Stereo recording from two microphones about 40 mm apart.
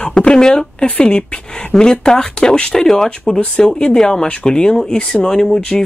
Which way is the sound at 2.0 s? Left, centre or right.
Centre.